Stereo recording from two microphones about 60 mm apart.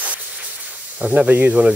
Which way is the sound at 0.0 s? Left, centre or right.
Right.